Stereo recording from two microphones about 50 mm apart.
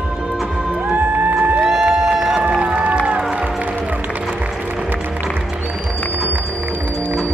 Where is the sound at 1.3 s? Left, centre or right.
Right.